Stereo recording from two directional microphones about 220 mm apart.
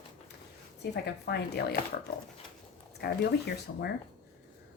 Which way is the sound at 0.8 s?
50° left (ahead or behind).